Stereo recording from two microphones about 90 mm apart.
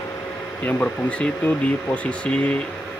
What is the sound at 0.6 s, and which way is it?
Speech, 15° left (ahead or behind).